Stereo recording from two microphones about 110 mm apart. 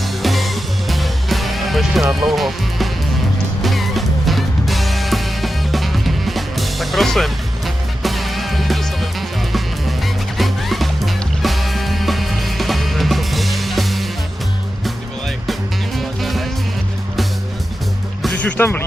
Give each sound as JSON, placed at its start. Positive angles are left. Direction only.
{"t": 0.2, "sound": "music", "side_deg": 0}
{"t": 10.3, "sound": "music", "side_deg": 0}
{"t": 16.0, "sound": "music", "side_deg": 0}
{"t": 18.2, "sound": "music", "side_deg": 5}
{"t": 18.5, "sound": "speech", "side_deg": 20}